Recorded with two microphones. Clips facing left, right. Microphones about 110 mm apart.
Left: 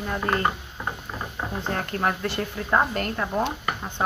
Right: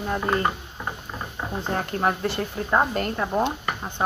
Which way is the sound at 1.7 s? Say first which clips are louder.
Right 3 dB; 25° right (ahead or behind).